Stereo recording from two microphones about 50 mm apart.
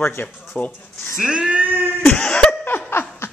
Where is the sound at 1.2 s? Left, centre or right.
Centre.